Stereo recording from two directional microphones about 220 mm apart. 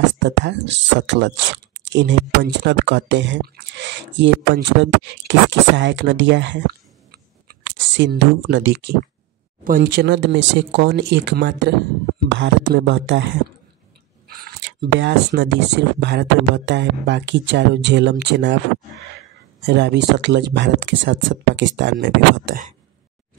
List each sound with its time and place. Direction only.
0.0 s speech: 55° right (ahead or behind)
14.2 s speech: 45° right (ahead or behind)
19.6 s speech: 50° right (ahead or behind)